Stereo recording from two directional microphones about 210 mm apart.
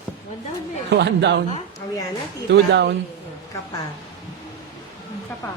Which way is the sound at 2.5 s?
55° right (ahead or behind).